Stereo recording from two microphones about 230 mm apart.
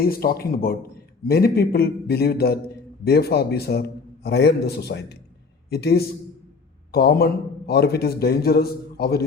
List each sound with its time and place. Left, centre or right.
0.0 s a man's voice: left